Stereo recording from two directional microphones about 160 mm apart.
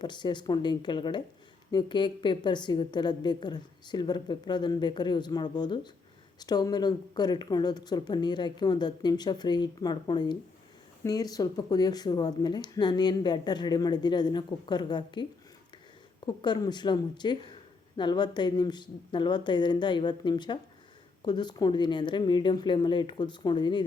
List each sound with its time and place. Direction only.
0.0 s speech: 30° left (ahead or behind)